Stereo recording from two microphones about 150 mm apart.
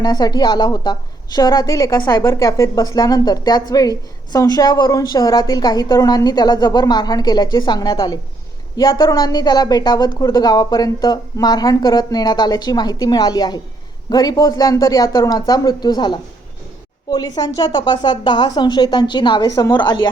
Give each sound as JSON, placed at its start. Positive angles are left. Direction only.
{"t": 0.0, "sound": "a woman's voice", "side_deg": 25}